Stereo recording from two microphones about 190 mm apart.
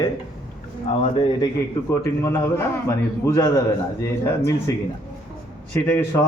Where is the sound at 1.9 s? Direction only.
15° left (ahead or behind).